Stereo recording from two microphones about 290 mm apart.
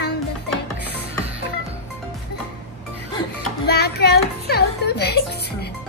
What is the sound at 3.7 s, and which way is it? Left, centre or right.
Music, left.